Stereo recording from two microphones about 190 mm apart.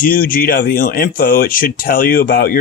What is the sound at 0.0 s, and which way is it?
Speech, 50° left (ahead or behind).